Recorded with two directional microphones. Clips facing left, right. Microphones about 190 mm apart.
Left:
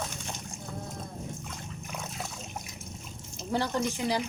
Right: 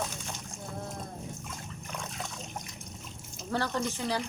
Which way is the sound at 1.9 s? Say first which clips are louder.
Even; 5° left (ahead or behind).